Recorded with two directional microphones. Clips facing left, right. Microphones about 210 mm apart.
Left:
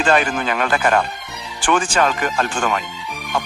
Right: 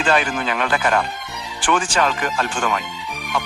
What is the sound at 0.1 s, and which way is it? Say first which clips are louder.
Speech: left 1 dB; 45° left (ahead or behind).